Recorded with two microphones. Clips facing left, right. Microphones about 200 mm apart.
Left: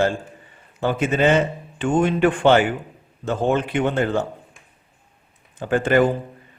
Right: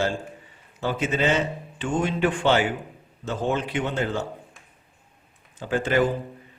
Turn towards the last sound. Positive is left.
turn(degrees=55)  # may be behind; listen again after turning